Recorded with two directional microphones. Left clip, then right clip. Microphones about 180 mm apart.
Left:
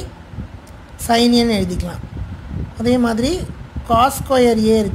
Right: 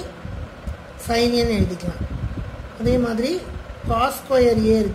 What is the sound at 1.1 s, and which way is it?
Speech, 30° left (ahead or behind).